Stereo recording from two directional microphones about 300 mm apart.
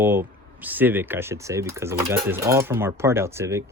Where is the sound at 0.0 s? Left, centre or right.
Centre.